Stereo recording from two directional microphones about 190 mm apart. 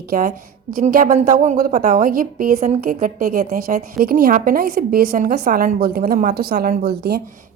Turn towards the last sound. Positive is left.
turn(degrees=-55)  # may be behind; listen again after turning